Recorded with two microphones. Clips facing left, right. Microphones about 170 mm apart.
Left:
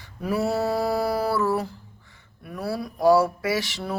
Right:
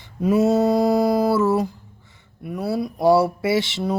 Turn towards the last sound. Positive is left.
turn(degrees=-20)  # may be behind; listen again after turning